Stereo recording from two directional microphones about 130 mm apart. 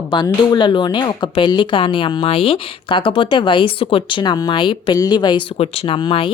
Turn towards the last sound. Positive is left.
turn(degrees=45)  # may be behind; listen again after turning